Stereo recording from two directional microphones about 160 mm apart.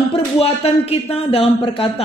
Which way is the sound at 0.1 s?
35° left (ahead or behind).